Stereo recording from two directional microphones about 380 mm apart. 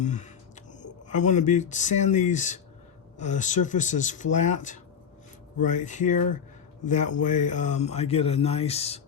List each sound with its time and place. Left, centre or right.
0.0 s speech: centre